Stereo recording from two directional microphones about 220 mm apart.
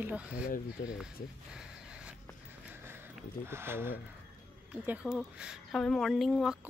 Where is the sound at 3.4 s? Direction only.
10° right (ahead or behind).